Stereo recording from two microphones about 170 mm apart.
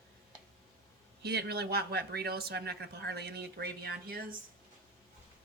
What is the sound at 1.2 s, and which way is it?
Speech, 70° right (ahead or behind).